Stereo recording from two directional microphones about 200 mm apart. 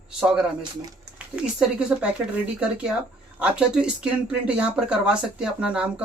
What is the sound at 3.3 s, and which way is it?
Speech, 5° right (ahead or behind).